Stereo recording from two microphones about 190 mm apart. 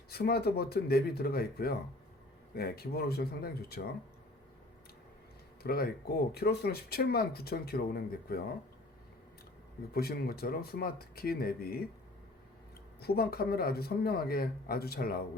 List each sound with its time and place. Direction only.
0.1 s speech: 55° left (ahead or behind)
5.6 s speech: 55° left (ahead or behind)
9.9 s speech: 55° left (ahead or behind)
13.0 s speech: 55° left (ahead or behind)